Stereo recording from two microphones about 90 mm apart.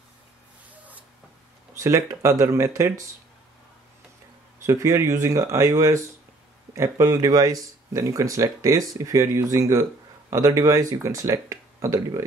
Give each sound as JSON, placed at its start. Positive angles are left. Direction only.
{"t": 1.7, "sound": "speech", "side_deg": -30}
{"t": 4.6, "sound": "speech", "side_deg": -30}